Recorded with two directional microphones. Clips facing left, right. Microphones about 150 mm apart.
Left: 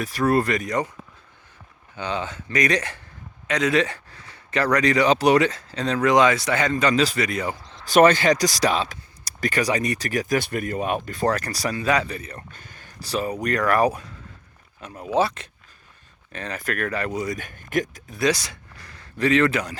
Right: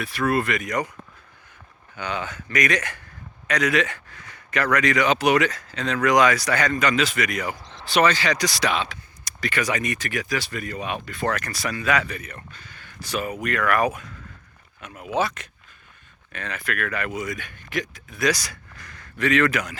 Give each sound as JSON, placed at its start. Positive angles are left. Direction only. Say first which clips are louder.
{"t": 0.0, "sound": "speech", "louder": "left 3 dB", "side_deg": 40}
{"t": 2.0, "sound": "speech", "louder": "left 2 dB", "side_deg": 30}
{"t": 7.9, "sound": "speech", "louder": "left 5 dB", "side_deg": 50}
{"t": 12.5, "sound": "speech", "louder": "even", "side_deg": 50}
{"t": 18.2, "sound": "speech", "louder": "left 1 dB", "side_deg": 25}